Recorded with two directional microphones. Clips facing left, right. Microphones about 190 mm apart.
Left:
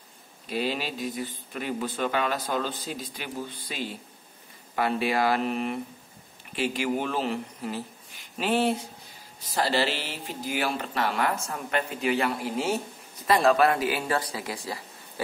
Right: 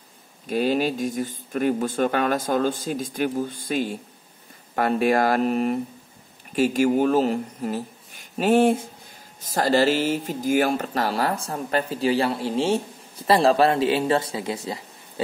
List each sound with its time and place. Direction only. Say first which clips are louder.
0.5 s speech: right 8 dB; 45° right (ahead or behind); by 15.2 s 25° right (ahead or behind)